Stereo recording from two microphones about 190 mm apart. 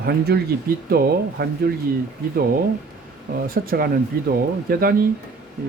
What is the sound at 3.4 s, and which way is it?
Speech, 50° right (ahead or behind).